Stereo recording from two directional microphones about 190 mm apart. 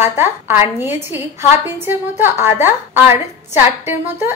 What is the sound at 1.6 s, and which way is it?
A woman's voice, 10° right (ahead or behind).